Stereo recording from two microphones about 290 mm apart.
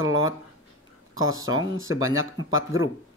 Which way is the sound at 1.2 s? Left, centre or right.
Centre.